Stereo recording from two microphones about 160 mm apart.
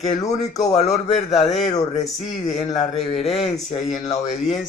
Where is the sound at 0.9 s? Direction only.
40° left (ahead or behind).